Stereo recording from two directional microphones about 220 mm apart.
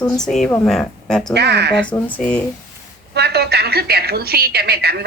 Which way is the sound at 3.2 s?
50° right (ahead or behind).